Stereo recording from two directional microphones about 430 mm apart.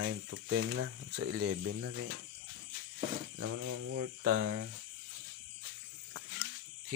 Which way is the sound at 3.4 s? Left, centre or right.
Right.